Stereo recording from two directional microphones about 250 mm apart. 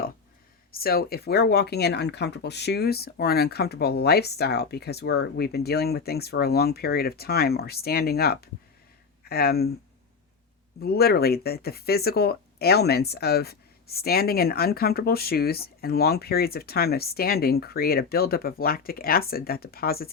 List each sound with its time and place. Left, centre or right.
0.7 s speech: left
10.8 s speech: left